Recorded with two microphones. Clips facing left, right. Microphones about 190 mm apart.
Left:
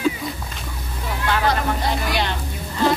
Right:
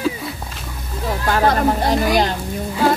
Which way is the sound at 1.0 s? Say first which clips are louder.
Right 4 dB; 40° right (ahead or behind).